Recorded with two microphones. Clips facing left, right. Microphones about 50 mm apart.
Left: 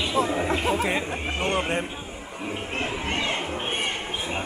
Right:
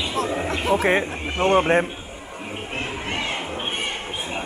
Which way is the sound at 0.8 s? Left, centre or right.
Right.